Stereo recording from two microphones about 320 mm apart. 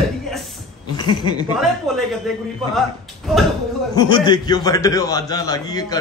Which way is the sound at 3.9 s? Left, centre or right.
Centre.